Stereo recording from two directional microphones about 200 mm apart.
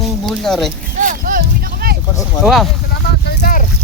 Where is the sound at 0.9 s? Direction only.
40° right (ahead or behind).